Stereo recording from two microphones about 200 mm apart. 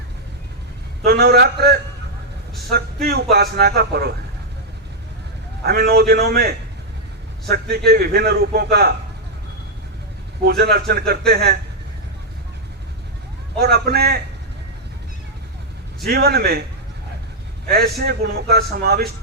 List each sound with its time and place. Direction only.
1.0 s a man's voice: 50° right (ahead or behind)
5.6 s a man's voice: 50° right (ahead or behind)
10.4 s a man's voice: 55° right (ahead or behind)
13.6 s a man's voice: 50° right (ahead or behind)
16.0 s a man's voice: 50° right (ahead or behind)
17.7 s a man's voice: 50° right (ahead or behind)